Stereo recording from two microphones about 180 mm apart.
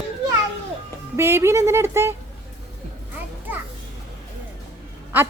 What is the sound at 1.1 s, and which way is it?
A woman's voice, 15° right (ahead or behind).